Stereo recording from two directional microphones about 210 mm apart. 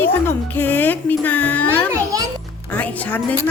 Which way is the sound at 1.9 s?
15° right (ahead or behind).